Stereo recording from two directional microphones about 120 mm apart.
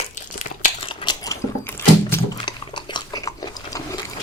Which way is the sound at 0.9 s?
45° left (ahead or behind).